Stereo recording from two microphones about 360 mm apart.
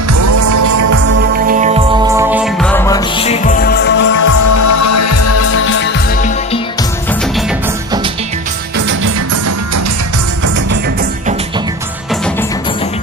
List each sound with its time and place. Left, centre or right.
0.1 s music: right
1.3 s music: right; by 4.1 s left
4.2 s music: left
6.2 s music: centre
7.1 s music: centre
8.7 s music: right
11.0 s music: centre